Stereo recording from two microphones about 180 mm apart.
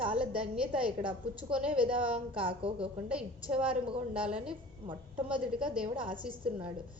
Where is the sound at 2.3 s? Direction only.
30° right (ahead or behind).